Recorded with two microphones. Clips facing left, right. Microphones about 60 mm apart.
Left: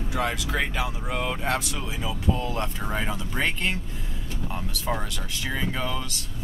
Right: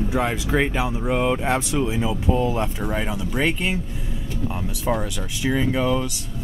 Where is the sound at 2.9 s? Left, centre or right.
Centre.